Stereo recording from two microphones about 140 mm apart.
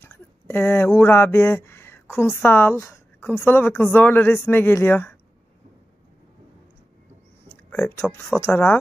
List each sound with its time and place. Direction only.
0.0 s speech: 15° left (ahead or behind)
7.4 s a sound: 15° left (ahead or behind)
8.4 s speech: 15° left (ahead or behind)